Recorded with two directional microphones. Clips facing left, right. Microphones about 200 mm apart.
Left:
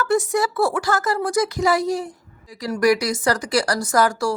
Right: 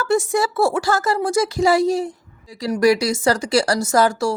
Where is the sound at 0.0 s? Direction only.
25° right (ahead or behind).